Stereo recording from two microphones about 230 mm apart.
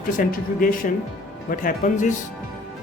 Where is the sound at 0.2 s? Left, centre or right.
Left.